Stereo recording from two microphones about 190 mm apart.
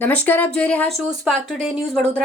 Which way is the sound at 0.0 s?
10° left (ahead or behind).